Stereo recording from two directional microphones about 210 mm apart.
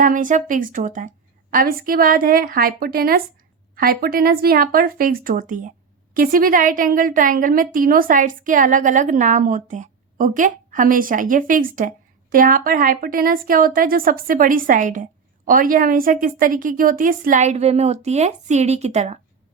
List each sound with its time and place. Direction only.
0.0 s a woman's voice: 40° right (ahead or behind)